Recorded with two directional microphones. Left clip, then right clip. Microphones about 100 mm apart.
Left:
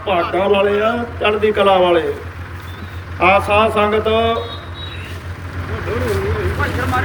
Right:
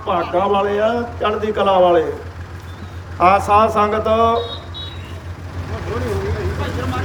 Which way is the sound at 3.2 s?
60° right (ahead or behind).